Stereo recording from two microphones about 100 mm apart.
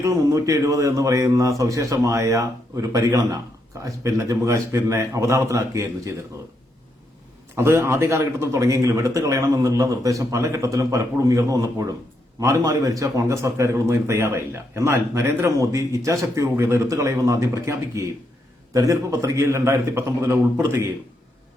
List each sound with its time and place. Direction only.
0.0 s a man's voice: 30° right (ahead or behind)
7.5 s a man's voice: 25° right (ahead or behind)